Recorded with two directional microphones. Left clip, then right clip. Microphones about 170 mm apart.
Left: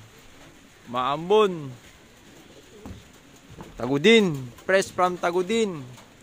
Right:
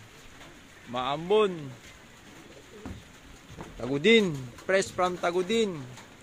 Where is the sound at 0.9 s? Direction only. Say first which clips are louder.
Left 5 dB; 30° left (ahead or behind).